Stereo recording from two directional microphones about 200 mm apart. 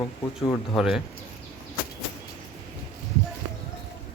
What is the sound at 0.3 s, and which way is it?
Speech, 25° left (ahead or behind).